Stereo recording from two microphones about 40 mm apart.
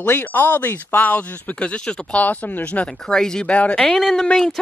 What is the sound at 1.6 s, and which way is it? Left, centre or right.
Speech, left.